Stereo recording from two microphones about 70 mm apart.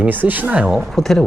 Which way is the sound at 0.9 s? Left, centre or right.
Centre.